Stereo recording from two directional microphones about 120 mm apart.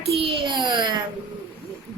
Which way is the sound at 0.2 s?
40° right (ahead or behind).